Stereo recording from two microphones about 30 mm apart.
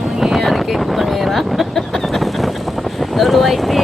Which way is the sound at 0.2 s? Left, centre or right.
Centre.